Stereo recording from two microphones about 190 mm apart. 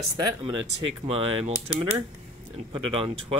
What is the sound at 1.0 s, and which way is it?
Speech, 35° right (ahead or behind).